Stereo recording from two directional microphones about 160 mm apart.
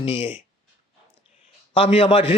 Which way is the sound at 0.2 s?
10° right (ahead or behind).